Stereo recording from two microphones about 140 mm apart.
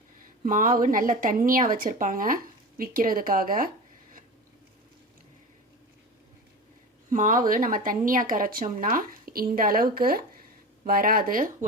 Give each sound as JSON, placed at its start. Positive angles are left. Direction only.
{"t": 0.4, "sound": "a woman's voice", "side_deg": -75}
{"t": 7.1, "sound": "a woman's voice", "side_deg": -70}